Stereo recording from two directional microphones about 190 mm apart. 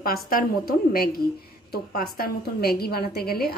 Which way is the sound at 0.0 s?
50° left (ahead or behind).